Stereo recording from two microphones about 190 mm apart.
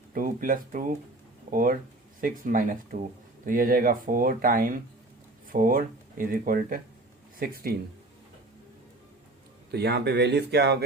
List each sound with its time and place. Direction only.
0.1 s speech: 45° right (ahead or behind)
9.7 s speech: 60° right (ahead or behind)